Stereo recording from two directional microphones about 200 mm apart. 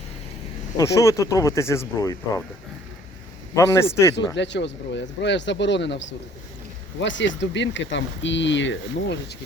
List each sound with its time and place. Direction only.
0.8 s speech: 15° left (ahead or behind)
3.5 s speech: 15° left (ahead or behind)
4.4 s speech: 60° left (ahead or behind)